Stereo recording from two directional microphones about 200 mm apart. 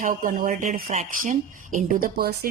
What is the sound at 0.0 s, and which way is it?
A woman's voice, 40° right (ahead or behind).